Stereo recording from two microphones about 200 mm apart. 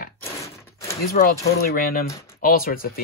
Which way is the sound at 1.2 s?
45° left (ahead or behind).